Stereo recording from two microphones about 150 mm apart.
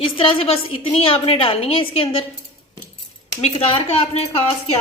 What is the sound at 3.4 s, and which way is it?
Speech, 40° left (ahead or behind).